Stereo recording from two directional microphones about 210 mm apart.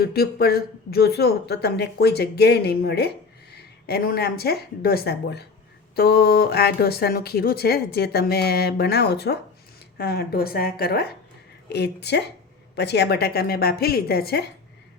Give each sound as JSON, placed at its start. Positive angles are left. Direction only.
{"t": 0.0, "sound": "speech", "side_deg": 45}